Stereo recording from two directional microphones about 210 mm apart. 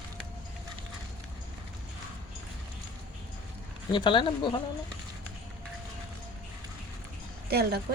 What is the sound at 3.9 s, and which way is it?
Speech, 20° left (ahead or behind).